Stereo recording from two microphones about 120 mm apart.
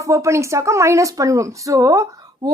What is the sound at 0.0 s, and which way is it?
A woman's voice, 25° right (ahead or behind).